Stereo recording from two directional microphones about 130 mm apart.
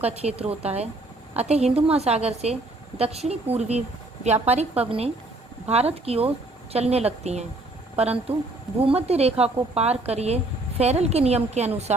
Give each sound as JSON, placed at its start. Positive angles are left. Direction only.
{"t": 0.2, "sound": "a woman's voice", "side_deg": -50}